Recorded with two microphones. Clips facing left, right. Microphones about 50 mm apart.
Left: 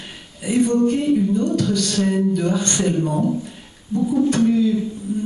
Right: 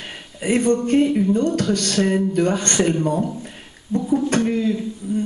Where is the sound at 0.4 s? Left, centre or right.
Right.